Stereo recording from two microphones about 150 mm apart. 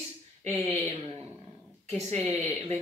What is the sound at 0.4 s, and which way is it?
Speech, 45° right (ahead or behind).